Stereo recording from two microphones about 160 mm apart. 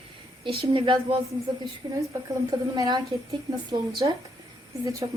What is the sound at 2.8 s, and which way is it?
Speech, 25° right (ahead or behind).